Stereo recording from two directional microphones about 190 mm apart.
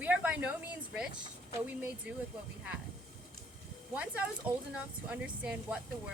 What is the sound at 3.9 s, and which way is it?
Speech, 5° right (ahead or behind).